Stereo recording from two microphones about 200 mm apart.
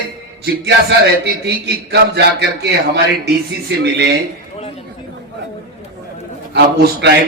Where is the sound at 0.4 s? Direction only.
55° right (ahead or behind).